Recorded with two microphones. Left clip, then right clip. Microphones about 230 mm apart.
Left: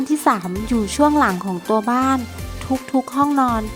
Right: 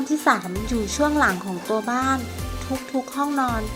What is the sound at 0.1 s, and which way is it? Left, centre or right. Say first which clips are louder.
Speech: left 2 dB; left.